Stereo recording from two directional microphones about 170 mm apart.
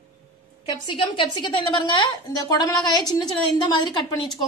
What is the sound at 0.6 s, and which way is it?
A woman's voice, 30° left (ahead or behind).